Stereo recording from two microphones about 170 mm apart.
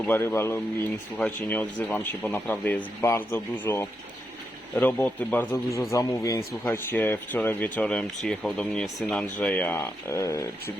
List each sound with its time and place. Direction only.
0.0 s speech: 15° left (ahead or behind)